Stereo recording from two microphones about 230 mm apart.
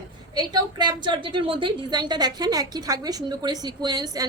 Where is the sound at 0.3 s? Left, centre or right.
Centre.